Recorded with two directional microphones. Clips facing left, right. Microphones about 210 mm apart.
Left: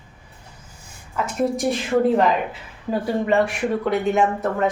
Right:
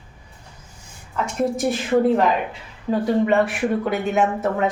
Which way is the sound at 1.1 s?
Centre (ahead or behind).